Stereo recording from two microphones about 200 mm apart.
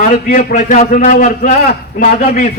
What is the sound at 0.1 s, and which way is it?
A man's voice, 40° left (ahead or behind).